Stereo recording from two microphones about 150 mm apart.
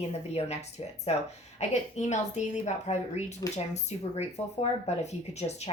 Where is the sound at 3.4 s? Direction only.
25° left (ahead or behind).